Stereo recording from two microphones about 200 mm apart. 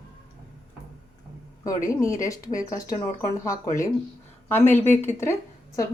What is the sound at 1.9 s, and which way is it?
A woman's voice, 15° left (ahead or behind).